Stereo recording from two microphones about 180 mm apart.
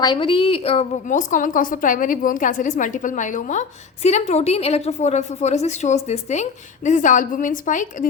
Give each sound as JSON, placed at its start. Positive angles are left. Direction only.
{"t": 0.0, "sound": "a woman's voice", "side_deg": 25}